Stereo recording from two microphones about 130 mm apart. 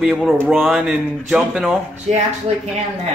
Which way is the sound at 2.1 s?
60° right (ahead or behind).